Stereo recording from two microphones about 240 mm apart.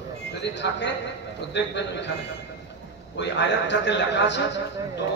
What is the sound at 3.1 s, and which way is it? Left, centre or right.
A man's voice, left.